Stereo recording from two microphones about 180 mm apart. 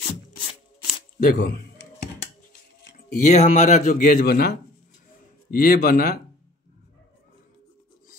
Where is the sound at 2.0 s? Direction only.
60° left (ahead or behind).